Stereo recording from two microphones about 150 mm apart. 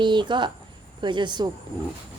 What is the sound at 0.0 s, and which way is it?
Speech, 30° right (ahead or behind).